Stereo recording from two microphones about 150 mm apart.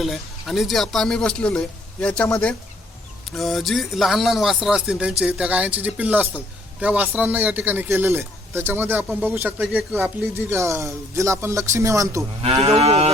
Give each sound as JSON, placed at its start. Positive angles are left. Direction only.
{"t": 0.0, "sound": "speech", "side_deg": 0}
{"t": 12.6, "sound": "moo", "side_deg": -45}